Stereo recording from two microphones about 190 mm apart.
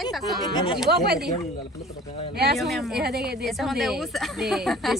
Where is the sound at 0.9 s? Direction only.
55° right (ahead or behind).